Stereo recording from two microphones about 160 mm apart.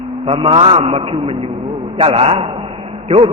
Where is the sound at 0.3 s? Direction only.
35° right (ahead or behind).